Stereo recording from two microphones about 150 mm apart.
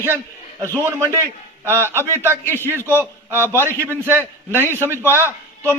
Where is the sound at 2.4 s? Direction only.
15° left (ahead or behind).